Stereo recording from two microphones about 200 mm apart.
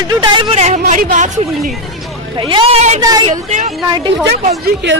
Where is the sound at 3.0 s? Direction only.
20° right (ahead or behind).